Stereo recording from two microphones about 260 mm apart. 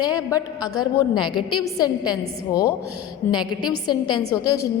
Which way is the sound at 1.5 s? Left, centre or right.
Centre.